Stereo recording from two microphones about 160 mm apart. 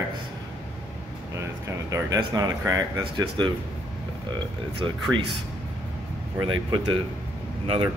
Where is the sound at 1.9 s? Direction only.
25° right (ahead or behind).